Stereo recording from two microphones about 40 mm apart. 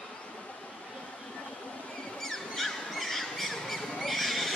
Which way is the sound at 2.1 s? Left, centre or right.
Centre.